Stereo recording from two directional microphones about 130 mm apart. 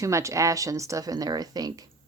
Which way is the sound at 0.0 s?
25° right (ahead or behind).